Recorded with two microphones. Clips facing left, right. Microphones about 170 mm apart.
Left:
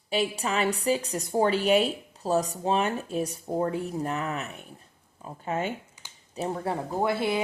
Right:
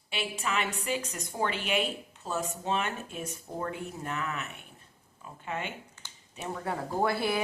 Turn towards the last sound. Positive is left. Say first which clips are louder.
# left 2 dB
turn(degrees=20)  # may be behind; listen again after turning